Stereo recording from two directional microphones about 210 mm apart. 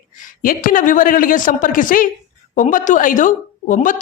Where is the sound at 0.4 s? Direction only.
40° left (ahead or behind).